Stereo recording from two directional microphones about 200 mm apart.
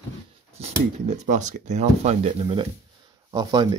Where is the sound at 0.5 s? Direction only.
35° right (ahead or behind).